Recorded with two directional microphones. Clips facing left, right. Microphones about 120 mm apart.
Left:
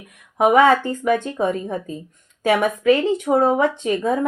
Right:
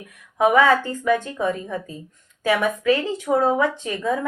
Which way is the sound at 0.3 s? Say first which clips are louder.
Left 2 dB; 20° left (ahead or behind).